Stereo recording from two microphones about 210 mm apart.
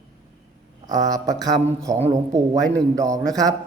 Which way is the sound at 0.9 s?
15° right (ahead or behind).